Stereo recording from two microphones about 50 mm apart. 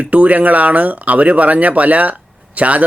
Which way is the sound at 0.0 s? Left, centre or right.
Right.